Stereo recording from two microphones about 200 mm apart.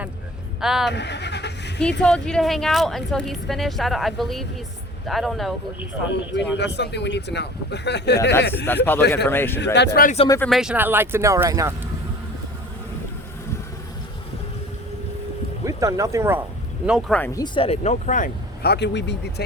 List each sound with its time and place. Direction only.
0.6 s speech: centre (ahead or behind)
0.9 s vehicle: 60° left (ahead or behind)
2.0 s speech: 5° left (ahead or behind)
6.1 s speech: 60° left (ahead or behind)
9.2 s speech: 10° left (ahead or behind)
9.7 s speech: 55° left (ahead or behind)
10.2 s speech: 15° left (ahead or behind)
10.5 s speech: 5° right (ahead or behind)
15.6 s speech: 15° right (ahead or behind)
16.8 s speech: 5° right (ahead or behind)
17.2 s speech: 10° left (ahead or behind)
17.4 s speech: 25° left (ahead or behind); by 19.5 s 60° left (ahead or behind)